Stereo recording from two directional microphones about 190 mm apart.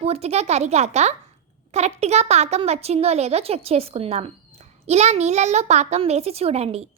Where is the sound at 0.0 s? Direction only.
35° right (ahead or behind).